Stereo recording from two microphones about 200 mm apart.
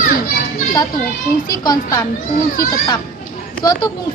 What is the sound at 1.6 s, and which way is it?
Speech, 20° left (ahead or behind).